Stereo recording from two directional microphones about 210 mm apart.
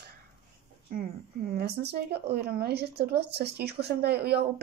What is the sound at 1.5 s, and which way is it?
Speech, 50° right (ahead or behind).